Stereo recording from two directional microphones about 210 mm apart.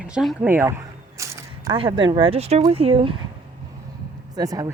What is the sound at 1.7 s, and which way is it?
Speech, 25° right (ahead or behind).